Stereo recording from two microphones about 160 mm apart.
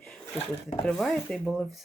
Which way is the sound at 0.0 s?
5° left (ahead or behind).